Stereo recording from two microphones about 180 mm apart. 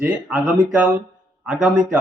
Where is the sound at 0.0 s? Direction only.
10° right (ahead or behind).